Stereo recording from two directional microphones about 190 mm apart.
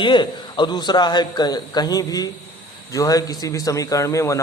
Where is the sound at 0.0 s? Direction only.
25° left (ahead or behind).